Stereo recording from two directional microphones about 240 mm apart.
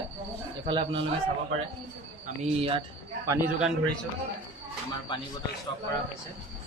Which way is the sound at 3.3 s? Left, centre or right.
Centre.